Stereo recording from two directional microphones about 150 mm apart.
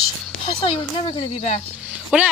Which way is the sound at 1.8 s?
5° right (ahead or behind).